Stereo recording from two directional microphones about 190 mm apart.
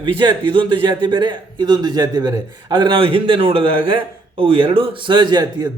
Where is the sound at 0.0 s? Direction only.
25° right (ahead or behind).